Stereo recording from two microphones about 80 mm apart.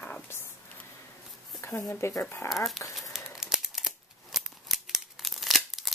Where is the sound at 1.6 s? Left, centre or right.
Left.